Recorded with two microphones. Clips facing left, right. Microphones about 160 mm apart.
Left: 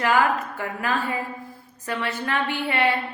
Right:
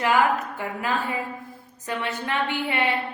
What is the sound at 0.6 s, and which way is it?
A woman's voice, 15° right (ahead or behind).